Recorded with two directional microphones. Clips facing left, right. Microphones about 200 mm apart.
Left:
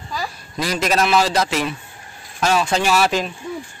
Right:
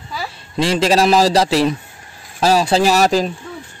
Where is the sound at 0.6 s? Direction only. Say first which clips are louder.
Right 5 dB; 30° right (ahead or behind).